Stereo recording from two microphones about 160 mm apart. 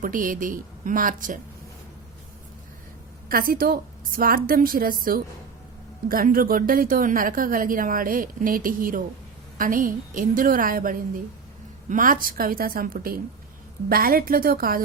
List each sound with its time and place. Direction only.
0.0 s a woman's voice: 60° right (ahead or behind)
3.2 s a woman's voice: 65° right (ahead or behind)